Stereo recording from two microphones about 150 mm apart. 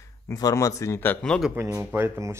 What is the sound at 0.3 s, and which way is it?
Speech, 25° left (ahead or behind).